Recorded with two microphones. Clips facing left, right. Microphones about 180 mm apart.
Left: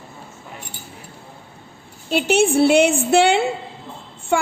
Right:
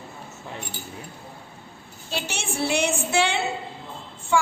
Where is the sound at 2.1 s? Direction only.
55° left (ahead or behind).